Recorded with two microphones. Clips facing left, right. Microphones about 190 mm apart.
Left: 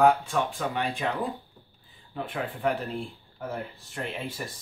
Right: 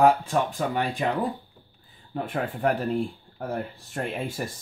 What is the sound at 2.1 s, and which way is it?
Speech, 45° right (ahead or behind).